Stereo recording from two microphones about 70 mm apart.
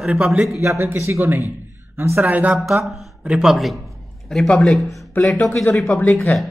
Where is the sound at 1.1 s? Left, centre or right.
Right.